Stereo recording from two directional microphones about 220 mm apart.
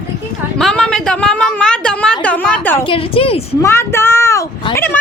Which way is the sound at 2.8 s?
25° left (ahead or behind).